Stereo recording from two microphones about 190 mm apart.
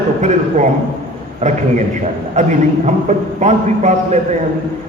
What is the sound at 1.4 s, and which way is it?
A man's voice, 35° right (ahead or behind).